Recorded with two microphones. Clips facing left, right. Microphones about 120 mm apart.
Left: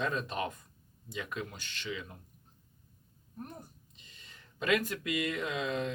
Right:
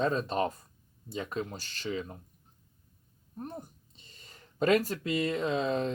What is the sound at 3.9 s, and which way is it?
Speech, 40° right (ahead or behind).